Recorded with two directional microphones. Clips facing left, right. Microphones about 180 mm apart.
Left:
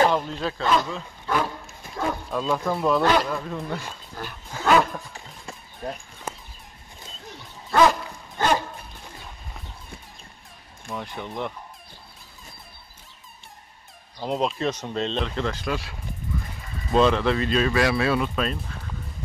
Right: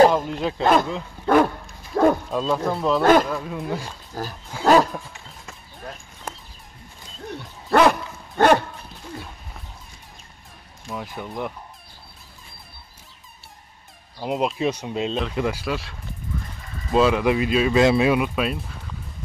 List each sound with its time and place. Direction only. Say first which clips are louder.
0.1 s speech: right 2 dB; 15° right (ahead or behind)
1.2 s dog: right 9 dB; 55° right (ahead or behind)
2.0 s bow-wow: right 11 dB; 55° right (ahead or behind)
2.5 s speech: even; centre (ahead or behind)
3.0 s speech: right 9 dB; 50° right (ahead or behind)
3.3 s speech: right 2 dB; 5° right (ahead or behind)
4.2 s wild animals: right 6 dB; 40° right (ahead or behind)
5.1 s a sound: left 2 dB; 30° left (ahead or behind)
7.2 s dog: right 10 dB; 60° right (ahead or behind)
10.9 s speech: right 1 dB; 5° right (ahead or behind)
14.2 s speech: right 2 dB; 5° right (ahead or behind)
17.7 s speech: right 5 dB; 20° right (ahead or behind)